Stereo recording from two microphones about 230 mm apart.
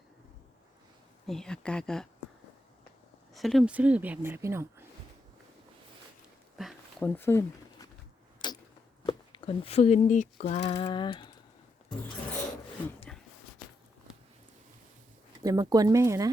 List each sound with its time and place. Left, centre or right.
1.3 s speech: centre
3.3 s speech: centre
6.6 s a sound: centre
7.2 s speech: centre
8.4 s arrow: centre
9.0 s speech: left
10.5 s a sound: left
13.1 s a sound: centre
15.4 s speech: centre